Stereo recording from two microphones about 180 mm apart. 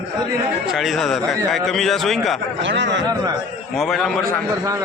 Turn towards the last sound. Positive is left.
turn(degrees=0)  # may be behind; listen again after turning